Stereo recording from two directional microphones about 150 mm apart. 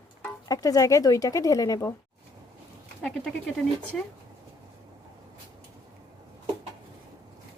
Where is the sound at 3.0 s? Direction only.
5° left (ahead or behind).